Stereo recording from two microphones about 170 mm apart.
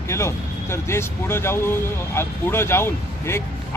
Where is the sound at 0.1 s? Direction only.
15° left (ahead or behind).